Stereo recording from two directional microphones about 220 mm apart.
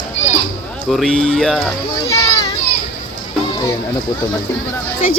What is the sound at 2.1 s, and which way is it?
Children playing, 15° left (ahead or behind).